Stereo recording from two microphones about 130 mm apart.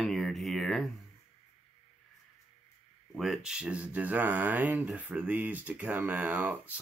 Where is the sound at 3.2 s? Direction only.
5° right (ahead or behind).